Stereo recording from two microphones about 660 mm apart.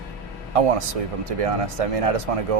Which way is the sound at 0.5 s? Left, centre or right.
Right.